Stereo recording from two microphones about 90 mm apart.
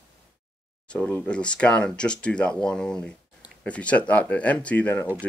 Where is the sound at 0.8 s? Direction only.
15° left (ahead or behind).